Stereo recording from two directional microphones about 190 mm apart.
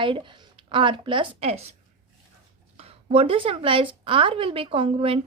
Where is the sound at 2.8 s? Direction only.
30° right (ahead or behind).